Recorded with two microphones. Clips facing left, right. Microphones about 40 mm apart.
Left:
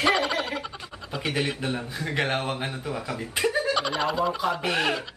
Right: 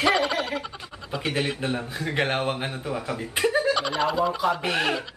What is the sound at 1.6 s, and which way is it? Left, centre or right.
A man's voice, centre.